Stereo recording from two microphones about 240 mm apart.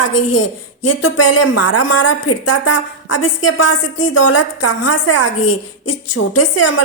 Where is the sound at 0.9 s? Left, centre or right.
Left.